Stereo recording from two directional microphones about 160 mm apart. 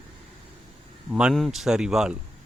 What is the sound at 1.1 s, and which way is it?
Speech, 5° right (ahead or behind).